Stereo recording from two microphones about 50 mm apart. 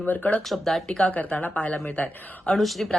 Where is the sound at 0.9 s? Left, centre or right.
Centre.